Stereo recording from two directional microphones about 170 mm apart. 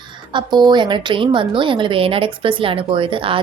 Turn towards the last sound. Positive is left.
turn(degrees=-30)  # may be behind; listen again after turning